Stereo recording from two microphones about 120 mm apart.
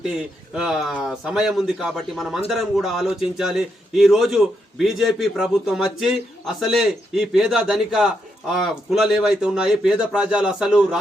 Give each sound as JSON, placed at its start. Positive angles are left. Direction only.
{"t": 0.0, "sound": "a man's voice", "side_deg": -5}